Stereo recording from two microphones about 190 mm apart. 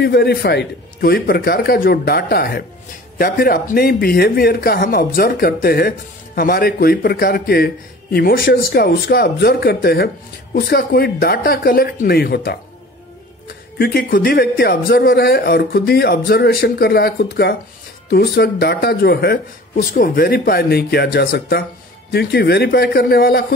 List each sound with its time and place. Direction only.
0.0 s a man's voice: 60° left (ahead or behind)
13.7 s a man's voice: 50° left (ahead or behind)